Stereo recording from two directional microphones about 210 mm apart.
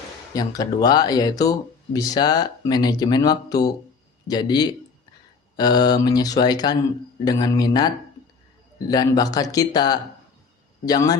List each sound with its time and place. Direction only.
0.3 s speech: 15° left (ahead or behind)